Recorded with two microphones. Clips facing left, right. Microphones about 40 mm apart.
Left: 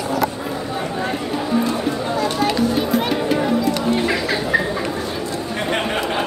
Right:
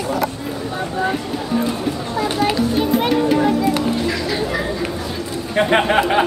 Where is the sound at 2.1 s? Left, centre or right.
Centre.